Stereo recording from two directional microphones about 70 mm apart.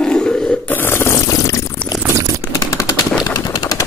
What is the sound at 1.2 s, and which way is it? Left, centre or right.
Pour, left.